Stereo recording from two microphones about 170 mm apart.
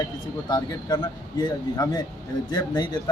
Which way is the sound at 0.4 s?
20° left (ahead or behind).